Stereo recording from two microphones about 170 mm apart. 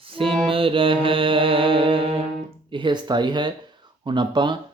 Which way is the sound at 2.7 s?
30° right (ahead or behind).